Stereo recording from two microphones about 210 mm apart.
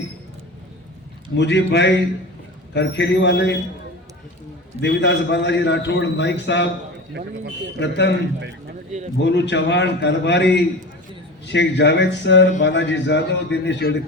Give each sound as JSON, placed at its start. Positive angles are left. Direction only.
{"t": 1.4, "sound": "a man's voice", "side_deg": 55}
{"t": 4.8, "sound": "a man's voice", "side_deg": 55}
{"t": 7.8, "sound": "a man's voice", "side_deg": 55}
{"t": 9.2, "sound": "a man's voice", "side_deg": 55}